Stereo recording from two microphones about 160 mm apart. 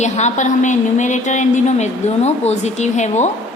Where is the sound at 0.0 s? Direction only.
45° left (ahead or behind).